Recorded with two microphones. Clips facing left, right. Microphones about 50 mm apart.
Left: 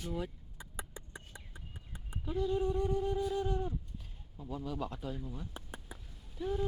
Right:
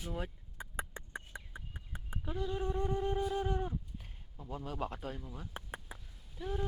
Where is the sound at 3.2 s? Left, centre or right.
Centre.